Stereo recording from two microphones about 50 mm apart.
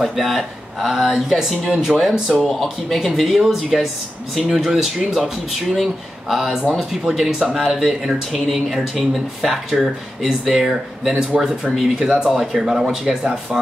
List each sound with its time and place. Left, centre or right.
0.0 s speech: centre
2.5 s speech: centre
12.3 s speech: centre